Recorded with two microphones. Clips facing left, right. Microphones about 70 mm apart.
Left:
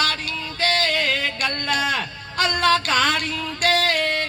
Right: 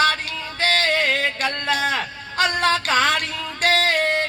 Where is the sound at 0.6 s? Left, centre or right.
Right.